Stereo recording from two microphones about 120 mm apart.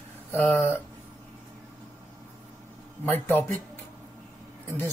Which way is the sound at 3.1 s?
15° left (ahead or behind).